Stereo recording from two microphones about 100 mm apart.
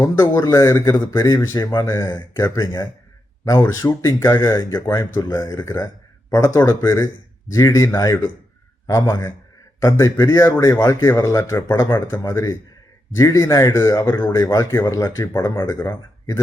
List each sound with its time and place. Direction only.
0.0 s a man's voice: 35° left (ahead or behind)